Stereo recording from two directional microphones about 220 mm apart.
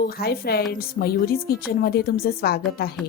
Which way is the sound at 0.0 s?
45° left (ahead or behind).